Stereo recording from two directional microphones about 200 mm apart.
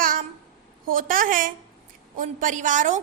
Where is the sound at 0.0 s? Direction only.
45° right (ahead or behind).